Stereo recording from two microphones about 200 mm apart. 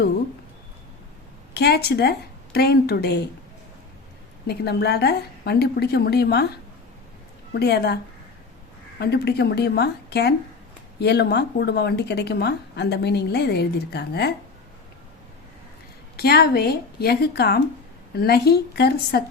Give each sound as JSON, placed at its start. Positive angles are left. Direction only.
{"t": 1.5, "sound": "a woman's voice", "side_deg": 55}
{"t": 4.4, "sound": "a woman's voice", "side_deg": 55}
{"t": 7.5, "sound": "a woman's voice", "side_deg": 55}
{"t": 9.0, "sound": "a woman's voice", "side_deg": 55}
{"t": 16.1, "sound": "a woman's voice", "side_deg": 50}